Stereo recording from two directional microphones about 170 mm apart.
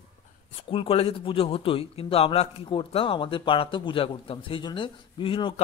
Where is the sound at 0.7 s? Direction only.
35° left (ahead or behind).